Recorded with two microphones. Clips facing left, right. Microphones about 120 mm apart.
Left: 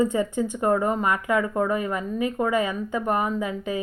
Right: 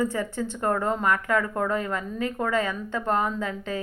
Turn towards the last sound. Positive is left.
turn(degrees=10)  # may be behind; listen again after turning